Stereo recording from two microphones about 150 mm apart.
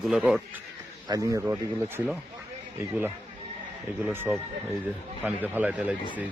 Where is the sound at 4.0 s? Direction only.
15° right (ahead or behind).